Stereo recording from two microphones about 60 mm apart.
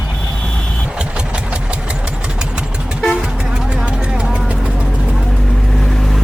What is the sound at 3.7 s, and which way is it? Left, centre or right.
Vehicle, centre.